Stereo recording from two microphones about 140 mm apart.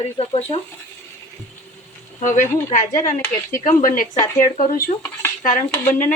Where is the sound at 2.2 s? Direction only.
60° left (ahead or behind).